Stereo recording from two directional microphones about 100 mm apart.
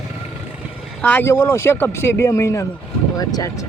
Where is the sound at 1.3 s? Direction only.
30° left (ahead or behind).